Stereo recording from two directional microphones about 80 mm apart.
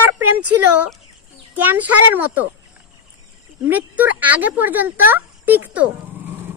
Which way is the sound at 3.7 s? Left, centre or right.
Centre.